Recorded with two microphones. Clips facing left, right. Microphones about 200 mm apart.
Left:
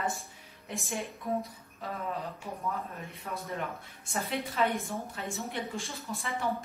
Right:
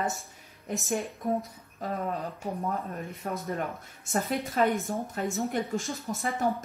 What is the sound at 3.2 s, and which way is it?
A woman's voice, 45° right (ahead or behind).